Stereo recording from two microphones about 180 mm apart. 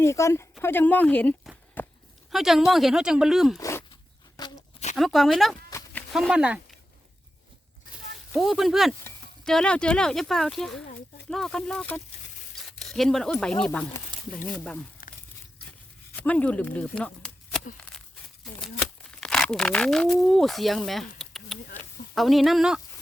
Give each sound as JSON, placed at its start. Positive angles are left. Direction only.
{"t": 0.0, "sound": "speech", "side_deg": 15}
{"t": 1.8, "sound": "walk", "side_deg": 10}
{"t": 2.3, "sound": "speech", "side_deg": 0}
{"t": 3.6, "sound": "dog", "side_deg": 15}
{"t": 4.4, "sound": "a sound", "side_deg": 20}
{"t": 4.9, "sound": "speech", "side_deg": 0}
{"t": 8.3, "sound": "speech", "side_deg": 0}
{"t": 15.0, "sound": "a sound", "side_deg": 50}
{"t": 16.1, "sound": "speech", "side_deg": 10}
{"t": 18.8, "sound": "speech", "side_deg": 5}
{"t": 21.2, "sound": "a sound", "side_deg": 0}
{"t": 22.1, "sound": "speech", "side_deg": 0}